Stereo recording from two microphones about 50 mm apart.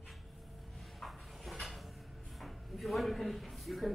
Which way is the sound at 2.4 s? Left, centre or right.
Centre.